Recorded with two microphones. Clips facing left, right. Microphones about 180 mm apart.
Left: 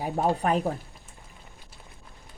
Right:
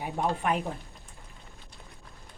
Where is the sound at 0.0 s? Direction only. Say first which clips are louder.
Left 4 dB; 35° left (ahead or behind).